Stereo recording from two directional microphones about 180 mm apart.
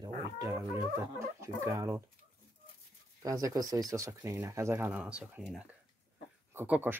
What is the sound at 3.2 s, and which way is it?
Speech, 20° right (ahead or behind).